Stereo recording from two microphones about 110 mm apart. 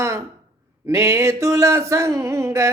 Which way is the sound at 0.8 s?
25° right (ahead or behind).